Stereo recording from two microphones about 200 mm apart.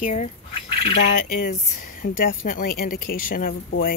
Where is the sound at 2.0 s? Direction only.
45° left (ahead or behind).